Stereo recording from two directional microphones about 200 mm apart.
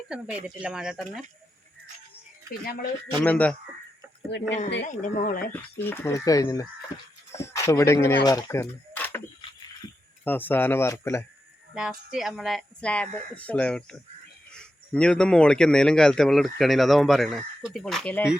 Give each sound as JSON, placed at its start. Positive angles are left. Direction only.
{"t": 0.1, "sound": "a man's voice", "side_deg": -5}
{"t": 2.6, "sound": "speech", "side_deg": 50}
{"t": 3.2, "sound": "speech", "side_deg": 5}
{"t": 4.3, "sound": "a woman's voice", "side_deg": 60}
{"t": 4.9, "sound": "speech", "side_deg": 40}
{"t": 5.8, "sound": "speech", "side_deg": 10}
{"t": 10.2, "sound": "speech", "side_deg": 10}
{"t": 11.7, "sound": "a man's voice", "side_deg": -5}